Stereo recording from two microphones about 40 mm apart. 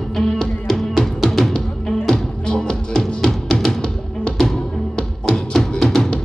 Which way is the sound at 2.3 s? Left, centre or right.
Centre.